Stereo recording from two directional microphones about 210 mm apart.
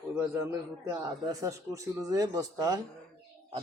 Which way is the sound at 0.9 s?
15° right (ahead or behind).